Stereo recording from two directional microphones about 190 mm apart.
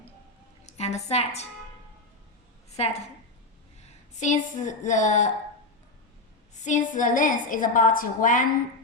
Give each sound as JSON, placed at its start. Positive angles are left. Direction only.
{"t": 0.6, "sound": "a woman's voice", "side_deg": 35}
{"t": 2.7, "sound": "a woman's voice", "side_deg": 35}
{"t": 4.2, "sound": "a woman's voice", "side_deg": 40}
{"t": 6.7, "sound": "a woman's voice", "side_deg": 40}